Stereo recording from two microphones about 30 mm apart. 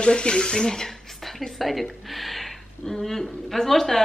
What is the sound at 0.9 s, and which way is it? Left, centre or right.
A woman's voice, centre.